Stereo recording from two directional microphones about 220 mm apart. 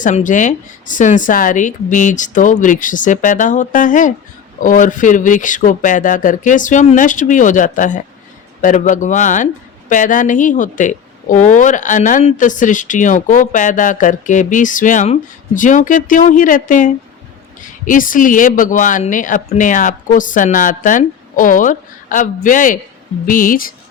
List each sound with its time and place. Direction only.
0.0 s speech: 35° left (ahead or behind)